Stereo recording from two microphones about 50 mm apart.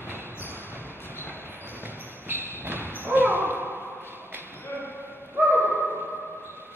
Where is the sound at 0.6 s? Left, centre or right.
Right.